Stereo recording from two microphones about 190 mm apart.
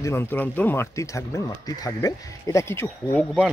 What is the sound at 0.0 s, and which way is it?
Speech, 15° left (ahead or behind).